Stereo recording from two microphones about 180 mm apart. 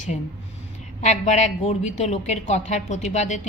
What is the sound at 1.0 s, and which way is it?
A woman's voice, 40° left (ahead or behind).